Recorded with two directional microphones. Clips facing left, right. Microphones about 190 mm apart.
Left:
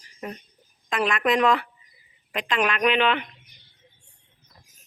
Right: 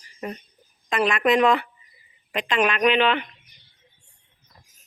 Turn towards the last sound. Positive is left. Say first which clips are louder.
# right 2 dB
turn(degrees=5)  # may be behind; listen again after turning